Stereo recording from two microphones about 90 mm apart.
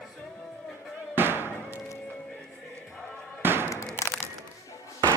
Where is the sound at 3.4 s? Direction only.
25° right (ahead or behind).